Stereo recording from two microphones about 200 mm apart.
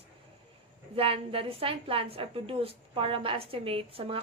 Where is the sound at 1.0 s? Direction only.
25° right (ahead or behind).